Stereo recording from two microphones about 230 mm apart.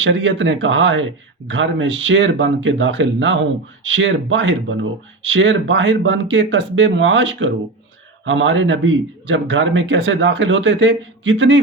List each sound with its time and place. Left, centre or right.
0.0 s speech: right